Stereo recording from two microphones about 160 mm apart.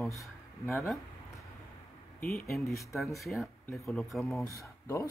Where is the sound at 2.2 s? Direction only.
Centre (ahead or behind).